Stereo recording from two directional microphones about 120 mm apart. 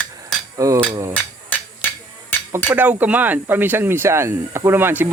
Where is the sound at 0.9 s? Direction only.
30° right (ahead or behind).